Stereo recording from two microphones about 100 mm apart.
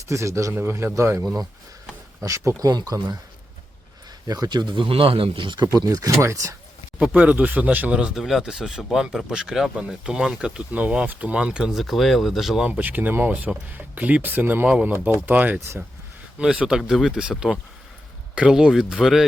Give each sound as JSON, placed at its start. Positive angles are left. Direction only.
{"t": 0.1, "sound": "a man's voice", "side_deg": -30}
{"t": 4.3, "sound": "speech", "side_deg": -45}
{"t": 5.7, "sound": "speech", "side_deg": -35}
{"t": 7.0, "sound": "speech", "side_deg": -10}
{"t": 12.6, "sound": "speech", "side_deg": -15}